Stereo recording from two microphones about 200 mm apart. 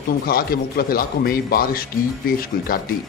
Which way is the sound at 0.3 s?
50° left (ahead or behind).